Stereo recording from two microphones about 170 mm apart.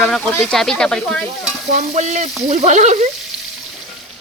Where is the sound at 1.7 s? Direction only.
40° right (ahead or behind).